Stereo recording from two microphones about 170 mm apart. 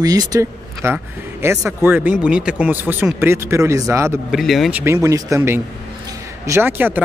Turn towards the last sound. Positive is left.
turn(degrees=-10)  # may be behind; listen again after turning